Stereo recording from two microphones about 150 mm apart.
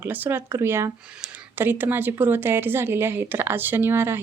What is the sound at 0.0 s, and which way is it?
Speech, 10° right (ahead or behind).